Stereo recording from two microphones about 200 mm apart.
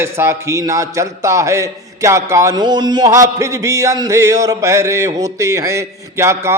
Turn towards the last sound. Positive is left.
turn(degrees=-15)  # may be behind; listen again after turning